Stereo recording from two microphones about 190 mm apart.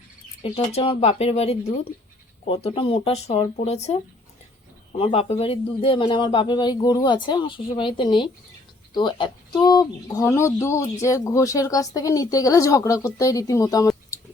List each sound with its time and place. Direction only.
0.4 s a man's voice: 30° left (ahead or behind)